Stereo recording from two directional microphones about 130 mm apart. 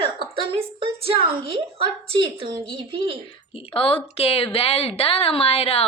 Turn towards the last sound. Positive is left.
turn(degrees=50)  # may be behind; listen again after turning